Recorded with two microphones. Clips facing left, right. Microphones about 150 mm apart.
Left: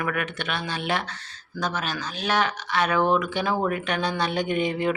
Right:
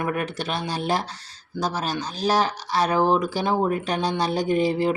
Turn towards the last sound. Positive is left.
turn(degrees=-35)  # may be behind; listen again after turning